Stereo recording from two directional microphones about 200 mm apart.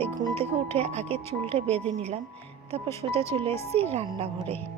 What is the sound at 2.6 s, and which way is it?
Speech, 30° right (ahead or behind).